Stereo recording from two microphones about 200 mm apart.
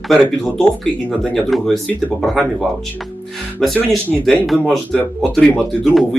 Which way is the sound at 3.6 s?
5° left (ahead or behind).